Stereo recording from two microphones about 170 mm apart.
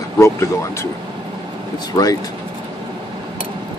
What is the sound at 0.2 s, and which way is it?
Speech, 15° left (ahead or behind).